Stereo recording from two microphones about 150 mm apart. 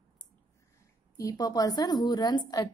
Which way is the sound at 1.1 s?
25° left (ahead or behind).